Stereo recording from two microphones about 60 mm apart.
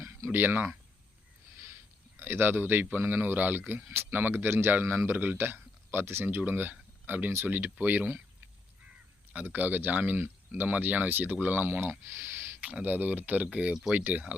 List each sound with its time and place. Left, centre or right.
0.3 s speech: right
2.1 s speech: right
9.3 s speech: right
12.5 s speech: right